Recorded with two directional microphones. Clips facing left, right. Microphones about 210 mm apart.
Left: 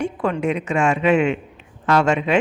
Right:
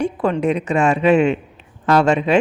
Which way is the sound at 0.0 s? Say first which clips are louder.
Right 3 dB; 35° right (ahead or behind).